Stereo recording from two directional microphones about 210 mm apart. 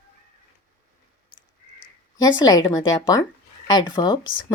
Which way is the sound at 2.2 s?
20° left (ahead or behind).